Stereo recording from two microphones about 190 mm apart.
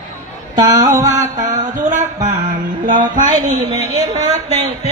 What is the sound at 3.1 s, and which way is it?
Speech, 40° right (ahead or behind).